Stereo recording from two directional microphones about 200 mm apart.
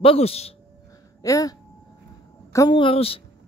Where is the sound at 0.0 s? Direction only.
30° left (ahead or behind).